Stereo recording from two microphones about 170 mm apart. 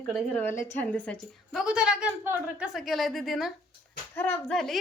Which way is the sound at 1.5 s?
5° right (ahead or behind).